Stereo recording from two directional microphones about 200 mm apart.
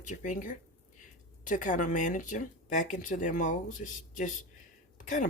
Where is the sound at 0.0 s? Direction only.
40° left (ahead or behind).